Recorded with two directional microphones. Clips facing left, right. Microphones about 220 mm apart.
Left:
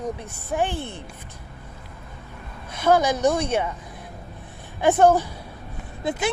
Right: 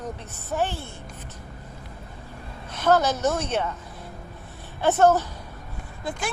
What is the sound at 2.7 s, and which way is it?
Speech, 10° left (ahead or behind).